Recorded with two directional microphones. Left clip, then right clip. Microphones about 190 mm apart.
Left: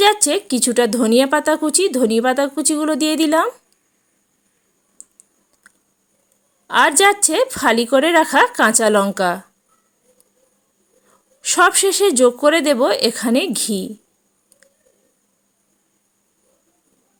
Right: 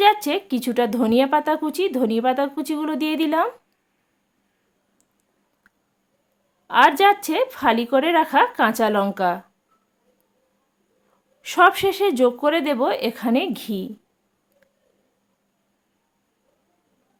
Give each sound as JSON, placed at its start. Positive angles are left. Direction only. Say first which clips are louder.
{"t": 0.0, "sound": "a woman's voice", "louder": "left 2 dB", "side_deg": 20}
{"t": 6.7, "sound": "a woman's voice", "louder": "left 1 dB", "side_deg": 25}
{"t": 11.4, "sound": "a woman's voice", "louder": "left 2 dB", "side_deg": 20}